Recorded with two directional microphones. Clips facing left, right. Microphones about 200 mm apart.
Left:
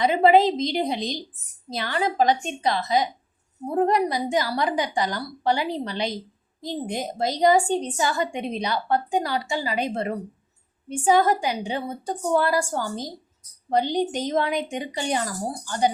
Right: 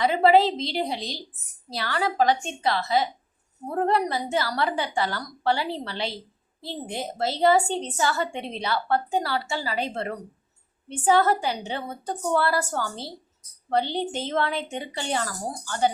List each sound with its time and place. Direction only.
0.0 s a woman's voice: 20° left (ahead or behind)